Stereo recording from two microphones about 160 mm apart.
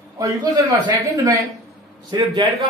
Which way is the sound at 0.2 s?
20° right (ahead or behind).